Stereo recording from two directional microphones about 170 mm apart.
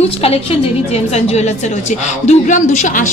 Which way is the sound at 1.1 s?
40° left (ahead or behind).